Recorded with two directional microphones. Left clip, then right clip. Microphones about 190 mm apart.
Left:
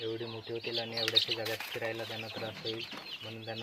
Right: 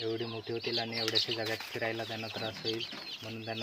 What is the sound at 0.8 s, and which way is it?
Speech, 60° right (ahead or behind).